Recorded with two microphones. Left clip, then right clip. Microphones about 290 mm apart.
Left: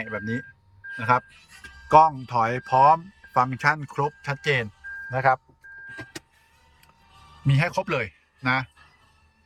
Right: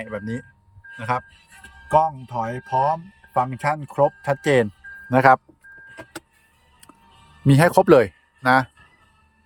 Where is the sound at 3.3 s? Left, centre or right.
Centre.